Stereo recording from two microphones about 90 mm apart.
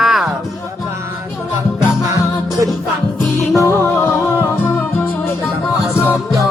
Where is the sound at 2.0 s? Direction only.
40° right (ahead or behind).